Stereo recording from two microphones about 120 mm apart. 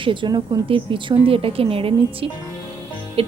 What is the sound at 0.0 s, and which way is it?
Speech, 45° right (ahead or behind).